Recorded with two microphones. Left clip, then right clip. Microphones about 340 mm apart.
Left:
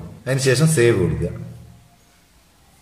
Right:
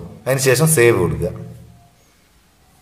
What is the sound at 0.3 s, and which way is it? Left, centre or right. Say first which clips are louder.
Speech: right 4 dB; centre.